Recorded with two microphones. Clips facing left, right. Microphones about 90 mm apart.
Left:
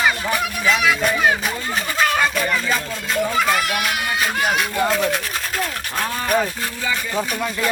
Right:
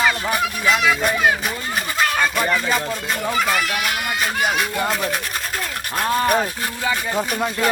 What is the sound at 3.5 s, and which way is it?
Speech, 5° left (ahead or behind).